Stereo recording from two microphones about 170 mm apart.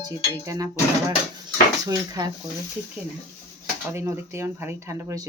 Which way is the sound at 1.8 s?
20° right (ahead or behind).